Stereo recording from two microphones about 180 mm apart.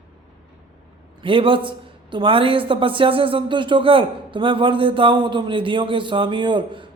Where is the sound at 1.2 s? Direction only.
30° right (ahead or behind).